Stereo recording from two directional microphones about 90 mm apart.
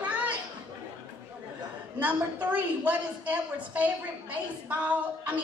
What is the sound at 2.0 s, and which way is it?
A woman's voice, 20° right (ahead or behind).